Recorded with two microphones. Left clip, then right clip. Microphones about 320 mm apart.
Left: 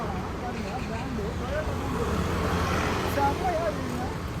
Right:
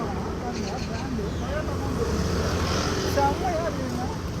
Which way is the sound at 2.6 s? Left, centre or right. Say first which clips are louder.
Even; left.